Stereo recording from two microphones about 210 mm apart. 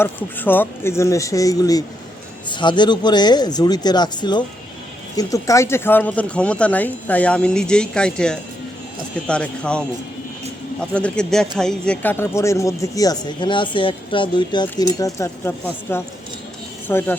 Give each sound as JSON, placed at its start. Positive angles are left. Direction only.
{"t": 0.0, "sound": "speech", "side_deg": 10}